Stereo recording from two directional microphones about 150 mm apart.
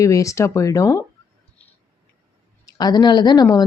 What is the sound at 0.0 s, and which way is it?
Speech, 20° left (ahead or behind).